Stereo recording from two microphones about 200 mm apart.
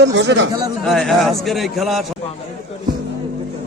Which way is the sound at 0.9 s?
Centre (ahead or behind).